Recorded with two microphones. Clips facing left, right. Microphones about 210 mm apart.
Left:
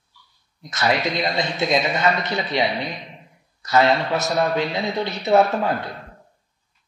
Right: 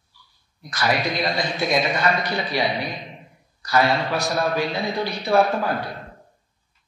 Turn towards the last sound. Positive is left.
turn(degrees=25)  # may be behind; listen again after turning